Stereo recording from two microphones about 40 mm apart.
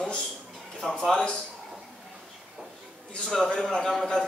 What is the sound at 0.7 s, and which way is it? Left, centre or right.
Speech, centre.